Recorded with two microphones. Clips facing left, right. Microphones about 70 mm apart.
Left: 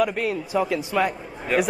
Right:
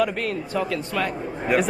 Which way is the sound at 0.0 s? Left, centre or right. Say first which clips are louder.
Left 1 dB; centre.